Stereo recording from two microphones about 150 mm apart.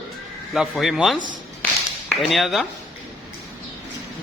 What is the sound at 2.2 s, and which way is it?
Speech, centre (ahead or behind).